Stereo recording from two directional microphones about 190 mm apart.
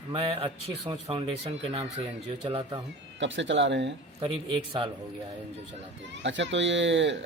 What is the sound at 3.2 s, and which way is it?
Speech, 75° right (ahead or behind).